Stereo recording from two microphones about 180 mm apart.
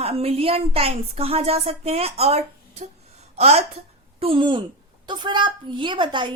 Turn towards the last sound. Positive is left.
turn(degrees=-25)  # may be behind; listen again after turning